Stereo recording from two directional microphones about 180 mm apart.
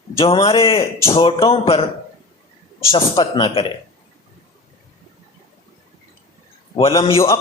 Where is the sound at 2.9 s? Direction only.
30° left (ahead or behind).